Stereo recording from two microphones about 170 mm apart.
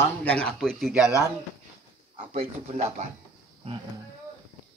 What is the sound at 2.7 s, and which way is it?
Speech, 45° right (ahead or behind).